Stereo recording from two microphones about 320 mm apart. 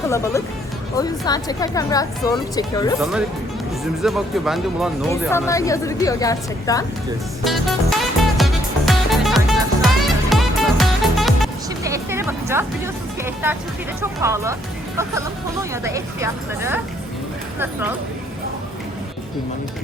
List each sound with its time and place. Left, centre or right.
0.9 s speech: centre
3.0 s speech: centre
7.4 s music: centre
14.0 s speech: centre
15.7 s speech: centre